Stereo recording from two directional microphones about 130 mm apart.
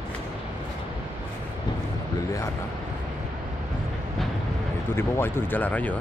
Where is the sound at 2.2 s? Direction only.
25° left (ahead or behind).